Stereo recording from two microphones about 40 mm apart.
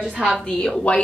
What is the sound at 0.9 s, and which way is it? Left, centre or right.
Speech, left.